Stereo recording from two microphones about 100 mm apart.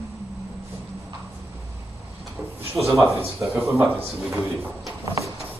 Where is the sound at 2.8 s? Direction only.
5° right (ahead or behind).